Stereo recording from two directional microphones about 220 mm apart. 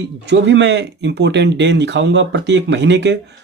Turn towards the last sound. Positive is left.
turn(degrees=-50)  # may be behind; listen again after turning